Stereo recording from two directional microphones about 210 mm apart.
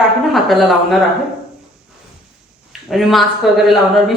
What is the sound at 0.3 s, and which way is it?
Speech, centre (ahead or behind).